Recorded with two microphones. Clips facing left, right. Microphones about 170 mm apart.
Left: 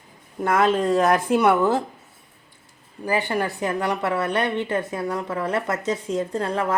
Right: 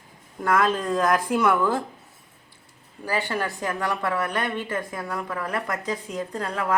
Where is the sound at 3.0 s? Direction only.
20° left (ahead or behind).